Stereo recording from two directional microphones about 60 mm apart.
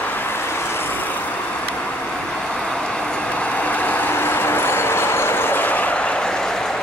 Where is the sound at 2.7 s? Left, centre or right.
Centre.